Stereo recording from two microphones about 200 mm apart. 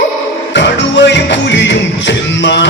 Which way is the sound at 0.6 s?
60° left (ahead or behind).